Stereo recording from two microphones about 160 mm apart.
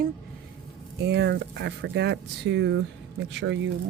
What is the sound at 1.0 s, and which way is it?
Speech, 90° right.